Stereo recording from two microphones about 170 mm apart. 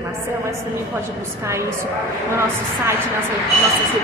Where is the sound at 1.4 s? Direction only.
15° right (ahead or behind).